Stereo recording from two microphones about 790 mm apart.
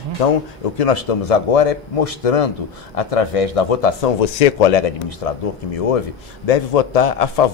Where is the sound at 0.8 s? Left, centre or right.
Left.